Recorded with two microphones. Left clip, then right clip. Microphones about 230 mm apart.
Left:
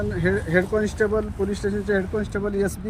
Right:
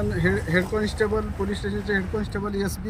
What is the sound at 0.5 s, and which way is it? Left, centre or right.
Speech, left.